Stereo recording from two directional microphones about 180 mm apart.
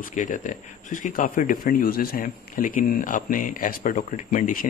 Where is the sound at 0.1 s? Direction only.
45° left (ahead or behind).